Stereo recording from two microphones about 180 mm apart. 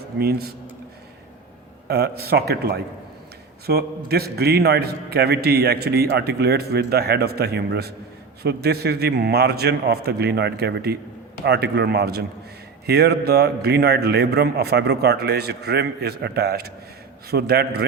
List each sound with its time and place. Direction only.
0.2 s a man's voice: 60° right (ahead or behind)
1.9 s a man's voice: 60° right (ahead or behind)